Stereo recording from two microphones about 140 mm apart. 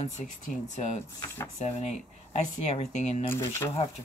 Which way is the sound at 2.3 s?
50° left (ahead or behind).